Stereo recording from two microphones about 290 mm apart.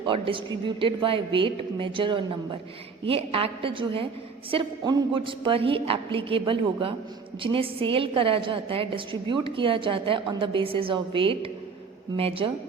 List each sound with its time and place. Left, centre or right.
0.0 s a woman's voice: centre